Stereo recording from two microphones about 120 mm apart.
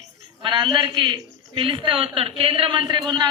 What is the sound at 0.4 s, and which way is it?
A man's voice, 40° right (ahead or behind).